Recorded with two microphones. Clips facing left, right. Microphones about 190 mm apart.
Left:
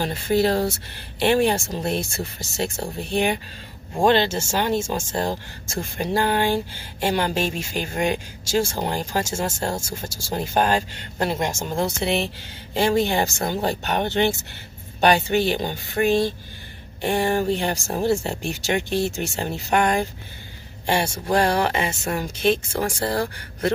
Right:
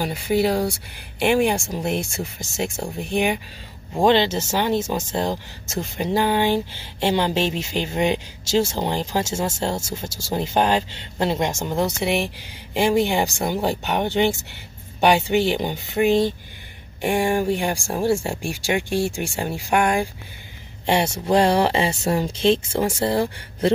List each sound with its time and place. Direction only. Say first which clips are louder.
0.0 s speech: even; 10° right (ahead or behind)
20.8 s a man's voice: right 2 dB; 25° right (ahead or behind)